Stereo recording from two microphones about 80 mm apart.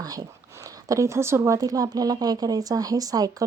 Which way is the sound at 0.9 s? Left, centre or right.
Right.